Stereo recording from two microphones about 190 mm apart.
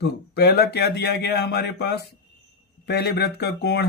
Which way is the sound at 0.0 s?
55° left (ahead or behind).